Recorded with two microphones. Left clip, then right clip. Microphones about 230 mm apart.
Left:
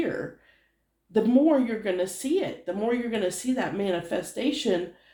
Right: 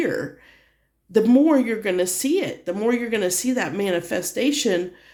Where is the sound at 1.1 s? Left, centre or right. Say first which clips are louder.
Right 5 dB; right.